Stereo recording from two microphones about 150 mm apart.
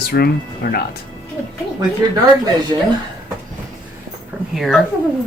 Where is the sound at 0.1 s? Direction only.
90° left.